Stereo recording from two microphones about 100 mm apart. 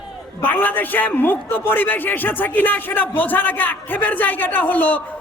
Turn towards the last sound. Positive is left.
turn(degrees=15)  # may be behind; listen again after turning